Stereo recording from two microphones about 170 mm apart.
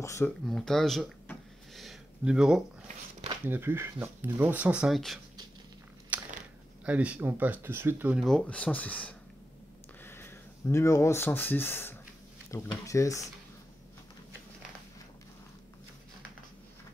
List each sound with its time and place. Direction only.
0.0 s speech: 15° left (ahead or behind)
0.5 s a sound: 5° left (ahead or behind)
3.4 s speech: 15° right (ahead or behind)
6.1 s biting: 10° right (ahead or behind)
6.9 s speech: 10° right (ahead or behind); by 13.3 s 20° left (ahead or behind)